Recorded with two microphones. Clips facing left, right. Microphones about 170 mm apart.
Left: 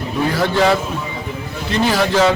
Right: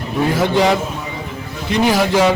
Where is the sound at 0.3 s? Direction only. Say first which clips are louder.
Even; 15° right (ahead or behind).